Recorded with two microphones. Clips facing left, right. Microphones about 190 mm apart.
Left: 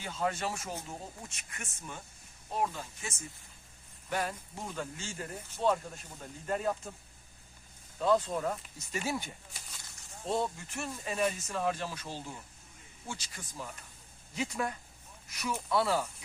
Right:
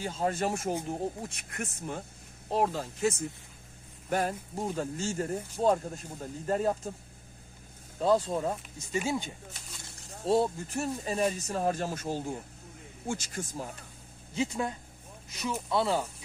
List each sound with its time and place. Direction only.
0.0 s speech: 35° right (ahead or behind); by 3.2 s 60° right (ahead or behind)
4.3 s speech: 35° right (ahead or behind)
7.9 s speech: 35° right (ahead or behind); by 9.3 s 20° right (ahead or behind)
10.1 s speech: 35° right (ahead or behind)
14.3 s speech: 25° right (ahead or behind)